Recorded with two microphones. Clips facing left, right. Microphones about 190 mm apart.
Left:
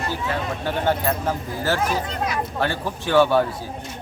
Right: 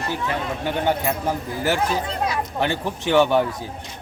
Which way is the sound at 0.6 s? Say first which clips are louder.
Even; 15° right (ahead or behind).